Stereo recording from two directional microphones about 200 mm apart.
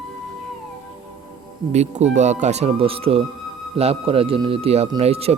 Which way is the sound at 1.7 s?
35° right (ahead or behind).